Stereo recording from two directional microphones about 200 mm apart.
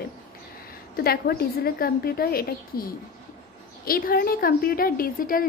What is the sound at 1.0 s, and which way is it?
A woman's voice, 50° left (ahead or behind).